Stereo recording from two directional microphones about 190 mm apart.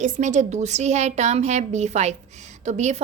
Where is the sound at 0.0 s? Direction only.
40° right (ahead or behind).